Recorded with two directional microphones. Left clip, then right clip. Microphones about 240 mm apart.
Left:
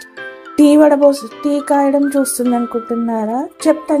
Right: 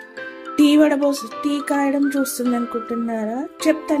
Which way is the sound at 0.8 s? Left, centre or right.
Centre.